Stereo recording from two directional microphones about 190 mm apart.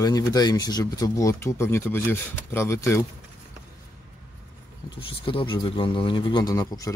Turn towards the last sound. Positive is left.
turn(degrees=20)  # may be behind; listen again after turning